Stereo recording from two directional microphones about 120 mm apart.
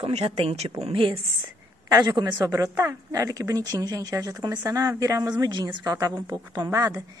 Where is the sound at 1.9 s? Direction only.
35° right (ahead or behind).